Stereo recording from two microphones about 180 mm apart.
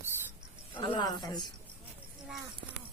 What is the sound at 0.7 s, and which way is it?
Speech, 25° left (ahead or behind).